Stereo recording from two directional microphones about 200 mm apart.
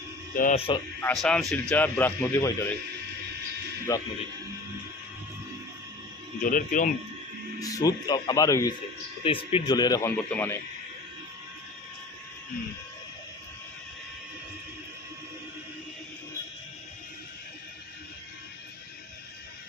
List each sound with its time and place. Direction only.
0.3 s speech: 45° left (ahead or behind)
0.6 s speech: 25° left (ahead or behind)
1.0 s a man's voice: 5° left (ahead or behind)
3.9 s a man's voice: 15° left (ahead or behind)
6.4 s speech: 40° left (ahead or behind)
7.6 s a man's voice: 20° left (ahead or behind)